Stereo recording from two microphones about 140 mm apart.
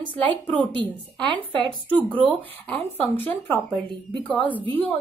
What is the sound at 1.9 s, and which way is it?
A woman's voice, 10° left (ahead or behind).